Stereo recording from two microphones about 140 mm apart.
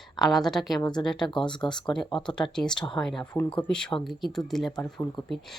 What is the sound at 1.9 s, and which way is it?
A woman's voice, 5° left (ahead or behind).